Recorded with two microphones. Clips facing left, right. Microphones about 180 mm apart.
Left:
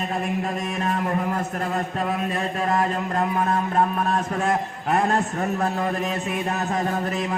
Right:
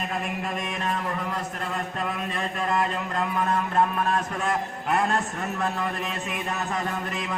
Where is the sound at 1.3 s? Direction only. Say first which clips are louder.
Left 5 dB; 40° left (ahead or behind).